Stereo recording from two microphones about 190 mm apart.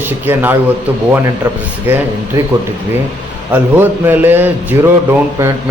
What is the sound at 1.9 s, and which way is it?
Speech, 10° right (ahead or behind).